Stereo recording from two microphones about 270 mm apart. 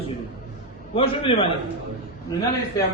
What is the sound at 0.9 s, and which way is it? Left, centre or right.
A man's voice, centre.